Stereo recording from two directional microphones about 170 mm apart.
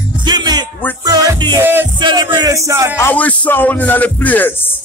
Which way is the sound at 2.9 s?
10° left (ahead or behind).